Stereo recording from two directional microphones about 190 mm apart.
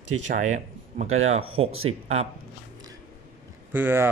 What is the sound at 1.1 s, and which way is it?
Speech, 35° right (ahead or behind).